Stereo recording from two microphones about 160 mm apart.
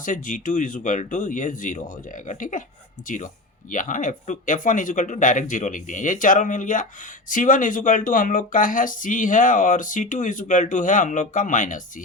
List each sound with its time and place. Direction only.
0.0 s speech: 55° left (ahead or behind)
3.7 s speech: 55° left (ahead or behind)